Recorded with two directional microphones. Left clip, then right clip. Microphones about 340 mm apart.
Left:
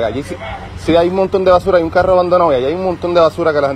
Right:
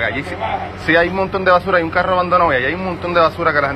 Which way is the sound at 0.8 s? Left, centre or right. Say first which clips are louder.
Left 3 dB; left.